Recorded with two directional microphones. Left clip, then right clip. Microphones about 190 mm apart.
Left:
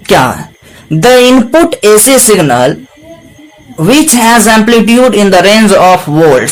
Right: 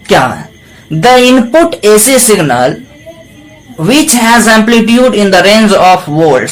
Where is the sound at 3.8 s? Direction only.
35° left (ahead or behind).